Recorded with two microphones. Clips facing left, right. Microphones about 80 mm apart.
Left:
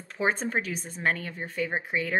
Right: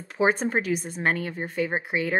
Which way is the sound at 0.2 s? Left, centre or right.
Centre.